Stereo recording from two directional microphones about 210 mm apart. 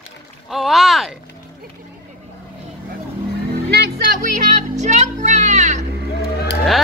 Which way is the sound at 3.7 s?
50° right (ahead or behind).